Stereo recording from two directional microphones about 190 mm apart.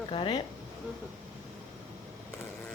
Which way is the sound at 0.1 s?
25° left (ahead or behind).